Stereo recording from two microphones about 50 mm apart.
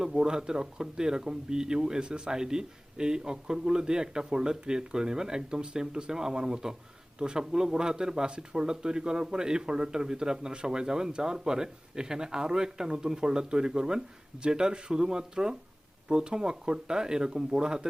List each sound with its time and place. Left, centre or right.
0.0 s speech: centre